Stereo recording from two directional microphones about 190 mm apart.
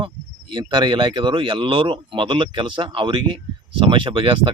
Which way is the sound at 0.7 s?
25° right (ahead or behind).